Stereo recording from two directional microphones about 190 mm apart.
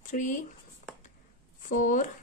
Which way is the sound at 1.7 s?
40° left (ahead or behind).